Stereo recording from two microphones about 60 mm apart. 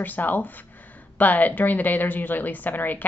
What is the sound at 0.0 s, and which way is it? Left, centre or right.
A woman's voice, left.